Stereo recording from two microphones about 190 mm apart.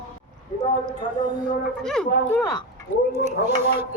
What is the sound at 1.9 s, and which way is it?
Speech, 5° left (ahead or behind).